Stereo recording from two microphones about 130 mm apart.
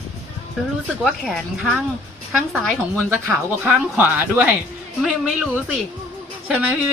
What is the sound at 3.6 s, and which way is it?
Speech, 15° right (ahead or behind).